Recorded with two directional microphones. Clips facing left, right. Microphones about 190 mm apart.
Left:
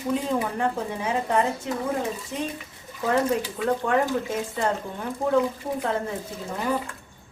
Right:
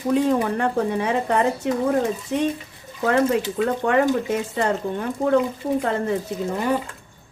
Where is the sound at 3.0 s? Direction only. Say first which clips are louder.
Right 4 dB; 80° right.